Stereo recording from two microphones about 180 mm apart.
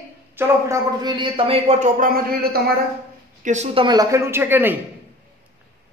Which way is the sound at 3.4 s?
40° right (ahead or behind).